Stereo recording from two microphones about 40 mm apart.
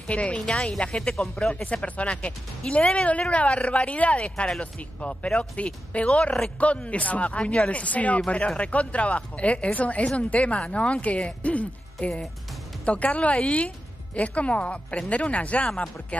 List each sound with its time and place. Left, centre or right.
0.1 s a woman's voice: left